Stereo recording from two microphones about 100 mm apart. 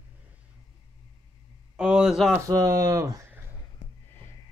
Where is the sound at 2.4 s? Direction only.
35° right (ahead or behind).